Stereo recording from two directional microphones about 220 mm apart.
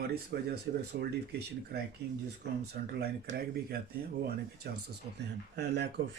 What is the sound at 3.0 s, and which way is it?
Speech, 45° right (ahead or behind).